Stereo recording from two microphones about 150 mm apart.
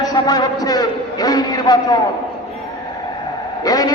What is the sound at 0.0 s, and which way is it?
A man's voice, 25° left (ahead or behind).